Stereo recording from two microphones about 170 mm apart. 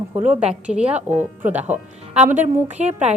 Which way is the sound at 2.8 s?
40° right (ahead or behind).